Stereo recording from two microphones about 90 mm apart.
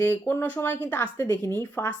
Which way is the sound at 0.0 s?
25° left (ahead or behind).